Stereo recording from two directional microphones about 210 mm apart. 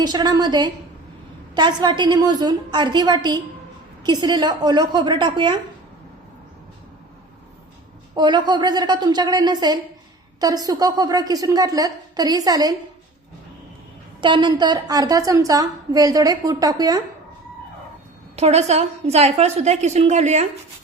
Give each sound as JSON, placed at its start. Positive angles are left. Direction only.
{"t": 0.0, "sound": "a woman's voice", "side_deg": -20}
{"t": 8.1, "sound": "a woman's voice", "side_deg": -20}
{"t": 14.2, "sound": "a woman's voice", "side_deg": -25}
{"t": 18.3, "sound": "a woman's voice", "side_deg": -30}